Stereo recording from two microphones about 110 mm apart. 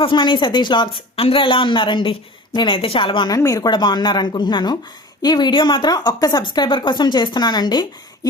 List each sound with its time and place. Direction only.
0.0 s speech: 50° left (ahead or behind)
3.2 s speech: 30° left (ahead or behind)